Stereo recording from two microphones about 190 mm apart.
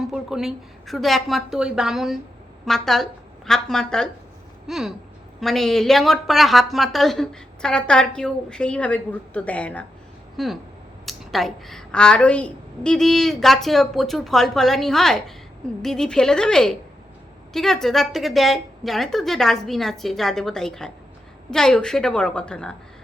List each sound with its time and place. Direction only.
0.0 s a woman's voice: centre (ahead or behind)